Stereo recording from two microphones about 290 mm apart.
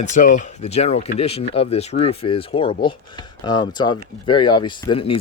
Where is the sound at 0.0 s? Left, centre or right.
Left.